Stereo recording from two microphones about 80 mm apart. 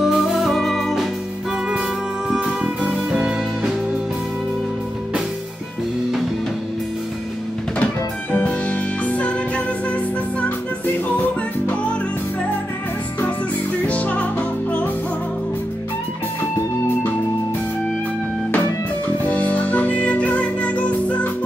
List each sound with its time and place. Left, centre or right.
0.0 s music: centre
2.2 s music: centre
7.8 s music: left
11.1 s music: left
13.8 s music: centre
19.2 s music: centre